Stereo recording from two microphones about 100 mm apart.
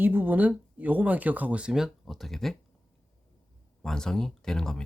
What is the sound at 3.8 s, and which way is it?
Speech, 5° left (ahead or behind).